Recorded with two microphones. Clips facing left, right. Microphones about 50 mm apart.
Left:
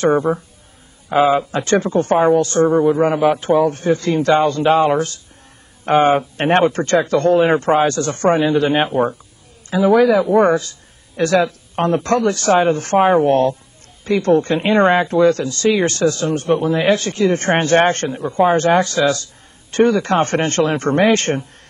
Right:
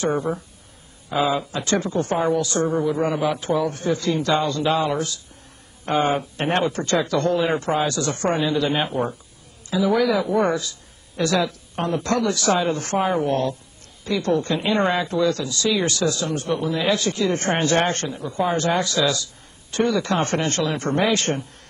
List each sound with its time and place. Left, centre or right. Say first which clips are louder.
0.3 s speech: left 7 dB; centre
1.1 s speech: left 7 dB; left